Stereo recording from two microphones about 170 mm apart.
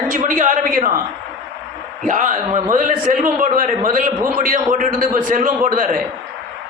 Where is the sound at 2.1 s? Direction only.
50° right (ahead or behind).